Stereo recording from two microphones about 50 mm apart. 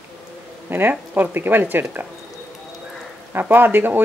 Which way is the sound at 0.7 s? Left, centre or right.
Right.